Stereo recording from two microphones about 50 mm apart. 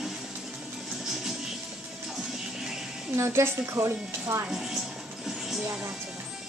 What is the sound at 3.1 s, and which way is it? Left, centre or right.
Speech, right.